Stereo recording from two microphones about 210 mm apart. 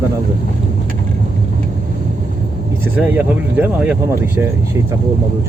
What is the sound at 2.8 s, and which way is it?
Speech, 10° right (ahead or behind).